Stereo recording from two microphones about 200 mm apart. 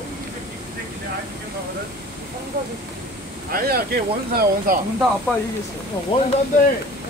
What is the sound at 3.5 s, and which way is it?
Speech, 45° right (ahead or behind).